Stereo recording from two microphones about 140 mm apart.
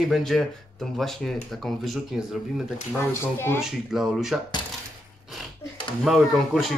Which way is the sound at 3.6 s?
5° right (ahead or behind).